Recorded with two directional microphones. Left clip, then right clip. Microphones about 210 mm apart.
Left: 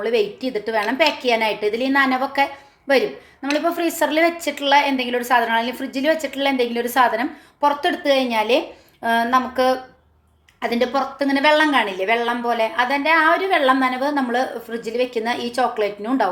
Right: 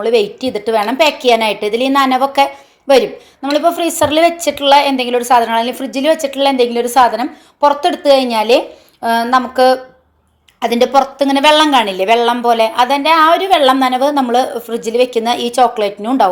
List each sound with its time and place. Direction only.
0.0 s a woman's voice: 25° right (ahead or behind)